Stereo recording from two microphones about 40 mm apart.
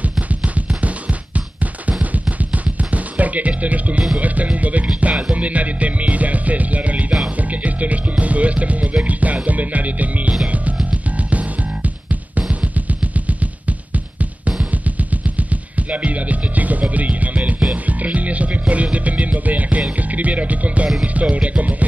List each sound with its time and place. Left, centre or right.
0.3 s music: right